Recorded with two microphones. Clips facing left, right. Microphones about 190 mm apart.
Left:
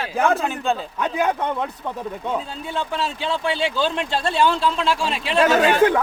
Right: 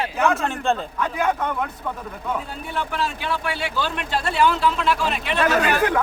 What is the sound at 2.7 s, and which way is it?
Speech, 25° left (ahead or behind).